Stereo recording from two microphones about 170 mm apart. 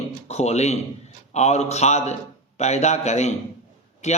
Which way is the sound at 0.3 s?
40° left (ahead or behind).